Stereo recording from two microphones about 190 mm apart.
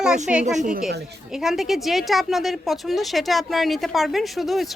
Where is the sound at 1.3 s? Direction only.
Centre (ahead or behind).